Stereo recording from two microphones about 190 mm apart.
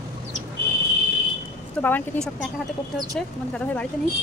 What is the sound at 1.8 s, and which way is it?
Speech, 10° left (ahead or behind).